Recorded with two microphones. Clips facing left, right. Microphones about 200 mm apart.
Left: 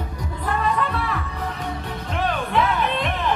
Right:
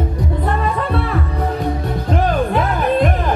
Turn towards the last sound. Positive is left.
turn(degrees=-45)  # may be behind; listen again after turning